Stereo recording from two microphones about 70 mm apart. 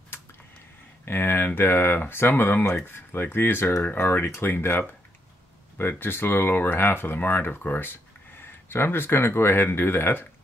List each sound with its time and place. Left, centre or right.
1.0 s speech: left